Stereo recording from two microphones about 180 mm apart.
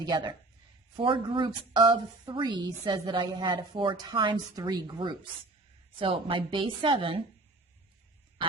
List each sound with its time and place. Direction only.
0.0 s speech: 20° right (ahead or behind)